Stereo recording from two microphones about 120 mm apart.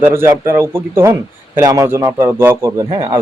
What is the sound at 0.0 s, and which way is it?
Speech, 20° right (ahead or behind).